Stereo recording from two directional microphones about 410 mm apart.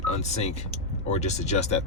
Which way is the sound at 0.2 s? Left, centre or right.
Centre.